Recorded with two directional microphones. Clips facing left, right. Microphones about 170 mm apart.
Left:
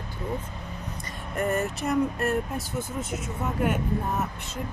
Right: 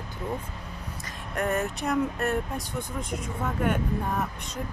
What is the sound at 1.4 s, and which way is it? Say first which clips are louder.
Speech: left 1 dB; centre (ahead or behind).